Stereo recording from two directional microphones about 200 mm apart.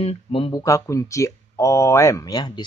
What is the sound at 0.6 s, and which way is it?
Speech, 15° left (ahead or behind).